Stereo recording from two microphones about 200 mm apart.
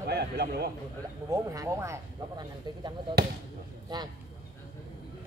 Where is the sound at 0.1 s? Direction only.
55° right (ahead or behind).